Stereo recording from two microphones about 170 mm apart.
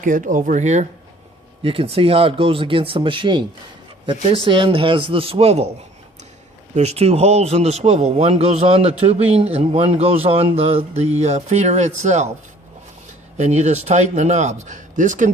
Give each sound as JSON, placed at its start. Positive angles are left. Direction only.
{"t": 0.0, "sound": "speech", "side_deg": -50}
{"t": 6.7, "sound": "speech", "side_deg": -40}
{"t": 13.3, "sound": "speech", "side_deg": -40}